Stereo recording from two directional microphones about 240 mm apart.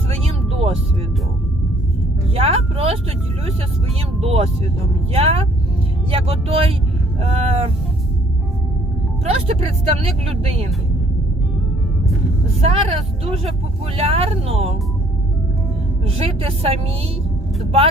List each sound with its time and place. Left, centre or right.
0.1 s vehicle: right
2.3 s speech: right
4.2 s speech: right
9.2 s speech: right
12.5 s speech: right
16.0 s speech: right